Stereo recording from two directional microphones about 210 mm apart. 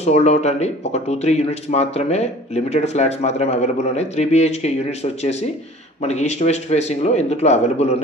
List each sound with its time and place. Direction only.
0.0 s speech: 30° left (ahead or behind)